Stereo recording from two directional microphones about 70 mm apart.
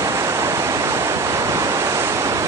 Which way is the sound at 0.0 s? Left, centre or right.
Right.